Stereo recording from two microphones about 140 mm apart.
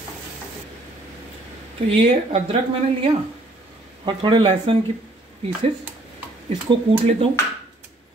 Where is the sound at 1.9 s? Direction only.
45° right (ahead or behind).